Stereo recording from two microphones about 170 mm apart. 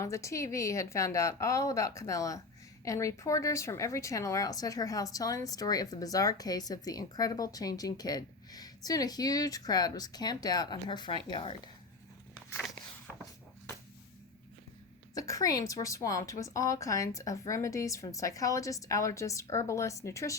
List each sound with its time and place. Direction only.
0.0 s a woman's voice: 15° left (ahead or behind)
15.1 s a woman's voice: 20° left (ahead or behind)